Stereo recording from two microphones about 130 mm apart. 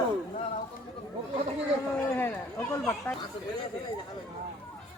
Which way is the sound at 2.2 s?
15° left (ahead or behind).